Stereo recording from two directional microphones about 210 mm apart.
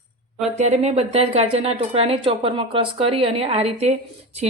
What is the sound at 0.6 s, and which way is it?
Speech, 30° right (ahead or behind).